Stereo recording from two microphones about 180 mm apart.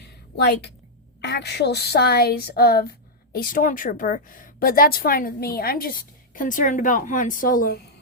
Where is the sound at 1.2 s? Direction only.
70° left (ahead or behind); by 7.7 s 50° left (ahead or behind).